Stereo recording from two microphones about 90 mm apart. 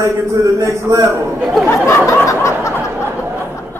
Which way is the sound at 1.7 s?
25° left (ahead or behind).